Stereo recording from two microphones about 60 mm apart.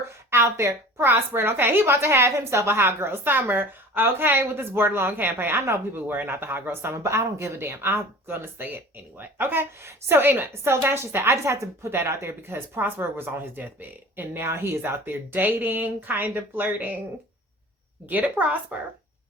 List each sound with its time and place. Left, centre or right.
0.3 s a woman's voice: right
1.0 s a woman's voice: right
6.9 s speech: right
11.9 s a woman's voice: right
14.8 s a woman's voice: right
18.0 s a woman's voice: right